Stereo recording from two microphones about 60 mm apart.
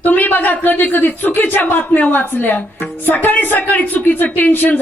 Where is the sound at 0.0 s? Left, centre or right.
Left.